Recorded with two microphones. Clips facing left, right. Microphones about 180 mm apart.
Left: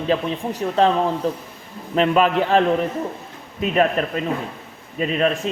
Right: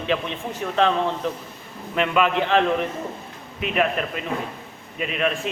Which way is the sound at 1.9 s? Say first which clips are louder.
Left 4 dB; 35° left (ahead or behind).